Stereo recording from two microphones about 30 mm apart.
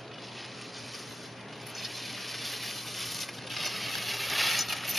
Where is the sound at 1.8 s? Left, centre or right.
Centre.